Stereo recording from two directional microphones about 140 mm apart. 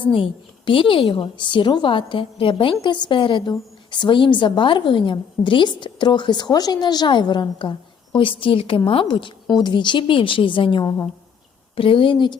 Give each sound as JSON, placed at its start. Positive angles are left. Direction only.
{"t": 0.0, "sound": "a woman's voice", "side_deg": 35}
{"t": 10.8, "sound": "a woman's voice", "side_deg": 15}
{"t": 11.8, "sound": "a woman's voice", "side_deg": 40}